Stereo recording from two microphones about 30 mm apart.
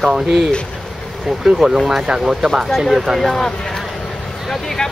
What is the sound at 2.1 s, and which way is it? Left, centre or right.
Speech, right.